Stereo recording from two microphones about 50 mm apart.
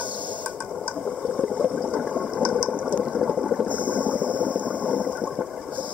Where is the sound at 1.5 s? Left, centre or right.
Centre.